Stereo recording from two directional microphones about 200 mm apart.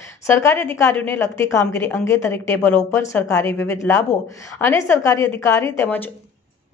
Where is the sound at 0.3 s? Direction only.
10° left (ahead or behind).